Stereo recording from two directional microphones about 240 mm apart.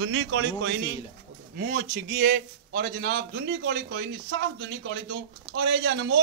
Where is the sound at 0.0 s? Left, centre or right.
Right.